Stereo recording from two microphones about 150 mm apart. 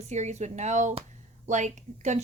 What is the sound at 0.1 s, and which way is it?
A woman's voice, 50° right (ahead or behind).